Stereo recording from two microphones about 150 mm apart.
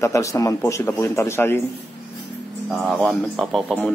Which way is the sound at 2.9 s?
Centre (ahead or behind).